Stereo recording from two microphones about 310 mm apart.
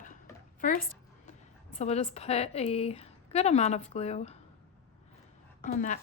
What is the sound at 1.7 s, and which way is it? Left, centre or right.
A woman's voice, left.